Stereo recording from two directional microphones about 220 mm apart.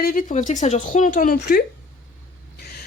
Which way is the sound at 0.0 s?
40° left (ahead or behind).